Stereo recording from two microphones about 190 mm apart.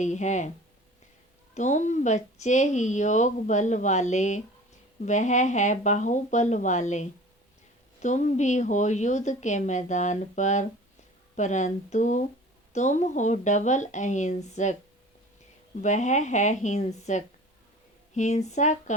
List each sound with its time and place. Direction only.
0.0 s speech: 40° left (ahead or behind)
1.5 s speech: 40° left (ahead or behind)
15.8 s speech: 40° left (ahead or behind)